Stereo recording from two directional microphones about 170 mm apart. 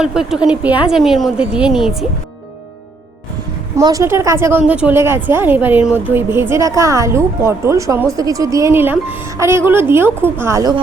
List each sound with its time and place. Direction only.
0.0 s speech: 5° right (ahead or behind)
3.8 s a woman's voice: 20° right (ahead or behind)